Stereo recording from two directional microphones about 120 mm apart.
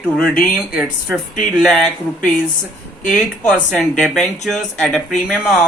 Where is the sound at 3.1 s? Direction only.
Centre (ahead or behind).